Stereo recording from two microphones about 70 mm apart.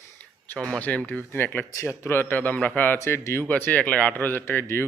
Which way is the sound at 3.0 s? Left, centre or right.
Left.